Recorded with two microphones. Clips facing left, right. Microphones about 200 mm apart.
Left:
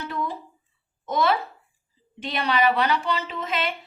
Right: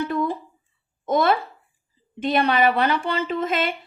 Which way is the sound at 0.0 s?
50° right (ahead or behind).